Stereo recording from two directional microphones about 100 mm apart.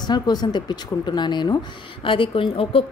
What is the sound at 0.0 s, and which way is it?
Speech, 45° left (ahead or behind).